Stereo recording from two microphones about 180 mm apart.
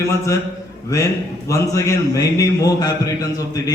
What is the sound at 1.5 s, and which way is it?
A man's voice, 15° left (ahead or behind).